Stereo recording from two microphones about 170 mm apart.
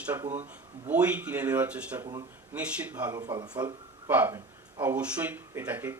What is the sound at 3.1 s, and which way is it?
Speech, 25° right (ahead or behind).